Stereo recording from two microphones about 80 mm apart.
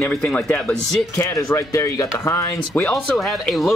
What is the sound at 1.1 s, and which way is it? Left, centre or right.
Speech, left.